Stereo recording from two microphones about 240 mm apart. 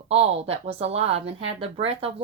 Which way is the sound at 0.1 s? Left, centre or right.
Right.